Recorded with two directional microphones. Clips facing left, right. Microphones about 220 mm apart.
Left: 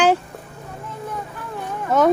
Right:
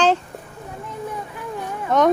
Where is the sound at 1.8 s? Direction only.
5° left (ahead or behind).